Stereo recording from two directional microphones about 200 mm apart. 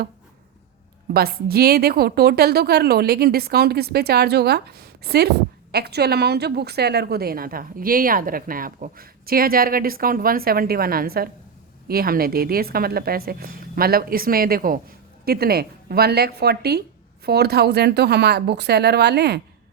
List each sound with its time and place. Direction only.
1.1 s a woman's voice: 50° right (ahead or behind)